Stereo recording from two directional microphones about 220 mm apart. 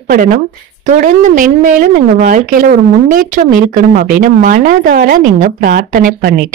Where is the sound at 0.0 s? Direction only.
40° right (ahead or behind).